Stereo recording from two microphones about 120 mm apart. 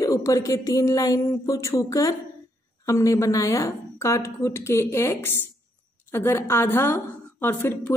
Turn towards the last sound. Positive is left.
turn(degrees=20)  # may be behind; listen again after turning